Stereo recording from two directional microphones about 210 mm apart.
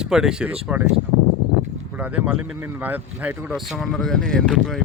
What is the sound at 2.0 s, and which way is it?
Speech, 5° right (ahead or behind).